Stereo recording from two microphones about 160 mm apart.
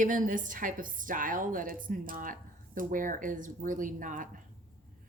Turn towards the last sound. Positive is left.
turn(degrees=-55)  # may be behind; listen again after turning